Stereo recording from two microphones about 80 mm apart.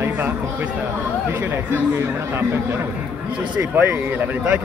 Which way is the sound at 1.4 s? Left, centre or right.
Right.